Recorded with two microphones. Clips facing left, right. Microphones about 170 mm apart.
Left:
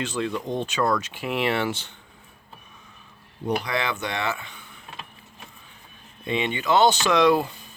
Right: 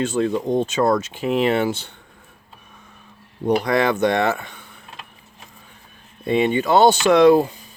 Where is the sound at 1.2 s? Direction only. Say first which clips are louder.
Right 9 dB; 30° right (ahead or behind).